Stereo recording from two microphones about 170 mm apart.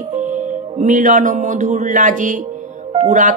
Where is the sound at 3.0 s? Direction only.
45° right (ahead or behind).